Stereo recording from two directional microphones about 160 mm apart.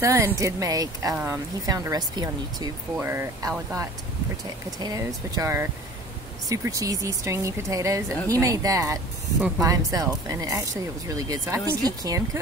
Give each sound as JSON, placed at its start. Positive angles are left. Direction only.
{"t": 0.0, "sound": "speech", "side_deg": -15}
{"t": 4.7, "sound": "speech", "side_deg": -25}